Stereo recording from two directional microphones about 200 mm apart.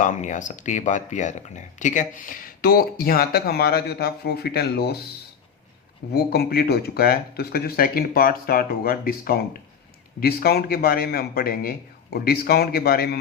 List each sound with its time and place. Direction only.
0.0 s speech: 40° left (ahead or behind)
6.1 s speech: 50° left (ahead or behind)